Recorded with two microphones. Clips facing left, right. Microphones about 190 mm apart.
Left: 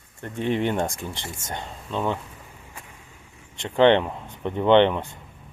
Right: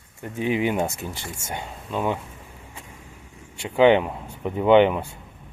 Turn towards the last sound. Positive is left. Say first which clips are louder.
# right 1 dB
turn(degrees=-10)  # may be behind; listen again after turning